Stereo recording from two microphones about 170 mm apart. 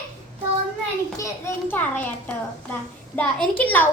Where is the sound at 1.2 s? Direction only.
15° left (ahead or behind).